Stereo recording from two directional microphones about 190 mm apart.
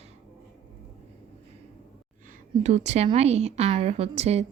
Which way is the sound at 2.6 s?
35° right (ahead or behind).